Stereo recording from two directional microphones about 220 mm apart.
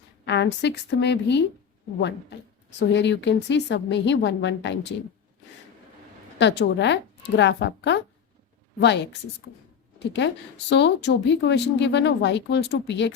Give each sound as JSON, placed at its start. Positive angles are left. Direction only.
{"t": 0.3, "sound": "speech", "side_deg": 50}
{"t": 2.7, "sound": "speech", "side_deg": 50}
{"t": 6.4, "sound": "speech", "side_deg": 55}